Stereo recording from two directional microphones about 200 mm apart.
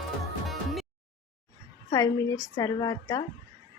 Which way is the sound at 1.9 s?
15° left (ahead or behind).